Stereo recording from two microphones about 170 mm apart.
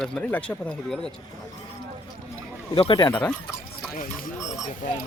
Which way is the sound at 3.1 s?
10° left (ahead or behind).